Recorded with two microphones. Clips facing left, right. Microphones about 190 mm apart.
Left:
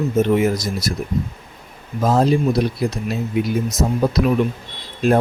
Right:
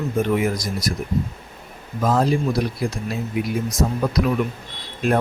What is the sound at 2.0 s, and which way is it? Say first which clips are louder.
Speech: left 3 dB; 25° left (ahead or behind).